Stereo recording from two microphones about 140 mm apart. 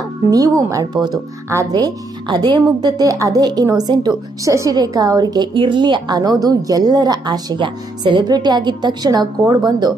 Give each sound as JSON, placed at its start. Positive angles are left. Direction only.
{"t": 0.3, "sound": "a woman's voice", "side_deg": -25}